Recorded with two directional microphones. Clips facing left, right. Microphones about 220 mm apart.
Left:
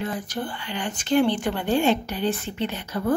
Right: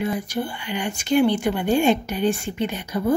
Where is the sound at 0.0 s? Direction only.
10° right (ahead or behind).